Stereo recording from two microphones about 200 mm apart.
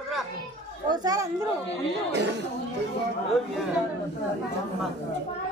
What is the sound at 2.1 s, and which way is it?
Speech, 60° right (ahead or behind).